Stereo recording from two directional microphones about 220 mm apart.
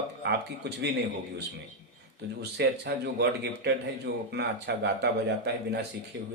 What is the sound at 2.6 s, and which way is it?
Speech, 50° right (ahead or behind).